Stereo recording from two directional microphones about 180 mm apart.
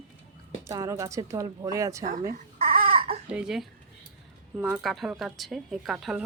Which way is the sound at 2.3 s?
55° right (ahead or behind).